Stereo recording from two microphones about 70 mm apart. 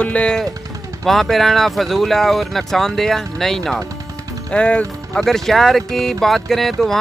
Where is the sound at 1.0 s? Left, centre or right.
Centre.